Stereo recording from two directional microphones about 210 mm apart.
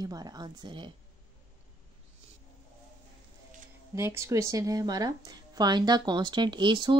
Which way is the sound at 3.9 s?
10° right (ahead or behind).